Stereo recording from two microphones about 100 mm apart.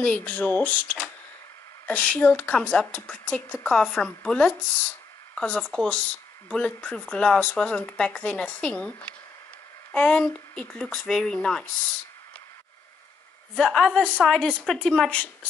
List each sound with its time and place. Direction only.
0.0 s speech: 15° left (ahead or behind)
9.9 s speech: 10° left (ahead or behind)
13.6 s speech: 5° left (ahead or behind)